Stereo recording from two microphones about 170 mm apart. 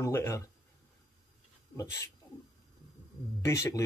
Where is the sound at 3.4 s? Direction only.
15° left (ahead or behind).